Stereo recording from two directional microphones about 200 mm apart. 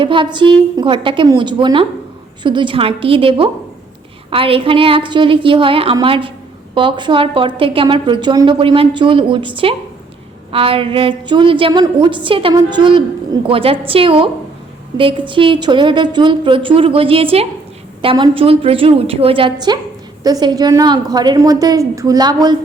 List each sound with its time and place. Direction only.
0.0 s a woman's voice: 25° right (ahead or behind)
15.3 s a woman's voice: 25° right (ahead or behind)